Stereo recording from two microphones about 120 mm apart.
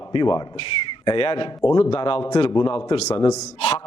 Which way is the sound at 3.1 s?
30° left (ahead or behind).